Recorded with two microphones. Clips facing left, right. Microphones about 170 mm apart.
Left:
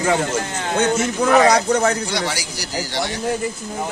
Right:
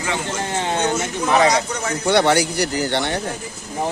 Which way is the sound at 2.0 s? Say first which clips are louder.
Right 9 dB; 60° right (ahead or behind).